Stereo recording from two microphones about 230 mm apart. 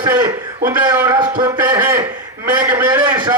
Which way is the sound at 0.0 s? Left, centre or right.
Centre.